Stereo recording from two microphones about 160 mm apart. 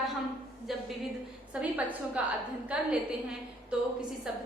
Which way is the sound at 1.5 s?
5° right (ahead or behind).